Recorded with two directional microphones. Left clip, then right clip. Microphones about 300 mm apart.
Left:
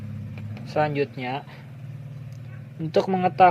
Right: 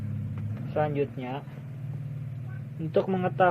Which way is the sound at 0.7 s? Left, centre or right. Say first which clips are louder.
Left 4 dB; left.